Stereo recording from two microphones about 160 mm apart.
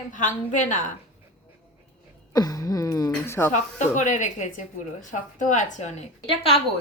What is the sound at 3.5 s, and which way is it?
Speech, 50° left (ahead or behind).